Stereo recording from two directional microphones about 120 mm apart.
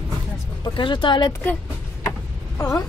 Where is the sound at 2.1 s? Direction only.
25° left (ahead or behind).